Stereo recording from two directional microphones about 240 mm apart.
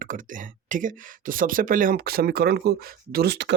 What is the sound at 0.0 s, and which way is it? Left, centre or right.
Speech, right.